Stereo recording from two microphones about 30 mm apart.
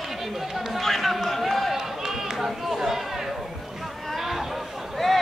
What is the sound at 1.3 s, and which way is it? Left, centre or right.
Run, centre.